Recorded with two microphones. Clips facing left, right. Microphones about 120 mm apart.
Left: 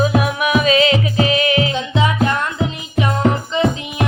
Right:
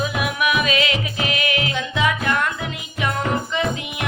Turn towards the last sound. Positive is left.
turn(degrees=30)  # may be behind; listen again after turning